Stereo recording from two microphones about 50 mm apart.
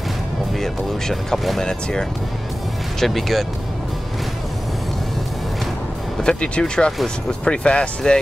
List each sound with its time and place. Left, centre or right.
0.6 s speech: centre
3.0 s speech: centre
6.2 s speech: left